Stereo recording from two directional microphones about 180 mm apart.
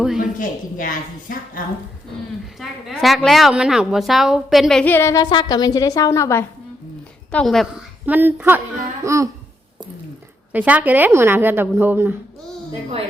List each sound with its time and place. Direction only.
0.2 s a woman's voice: 50° left (ahead or behind)
2.6 s a woman's voice: centre (ahead or behind); by 6.4 s 15° left (ahead or behind)
7.3 s a woman's voice: 5° left (ahead or behind)
8.0 s a woman's voice: 10° right (ahead or behind)
10.5 s a woman's voice: 10° right (ahead or behind)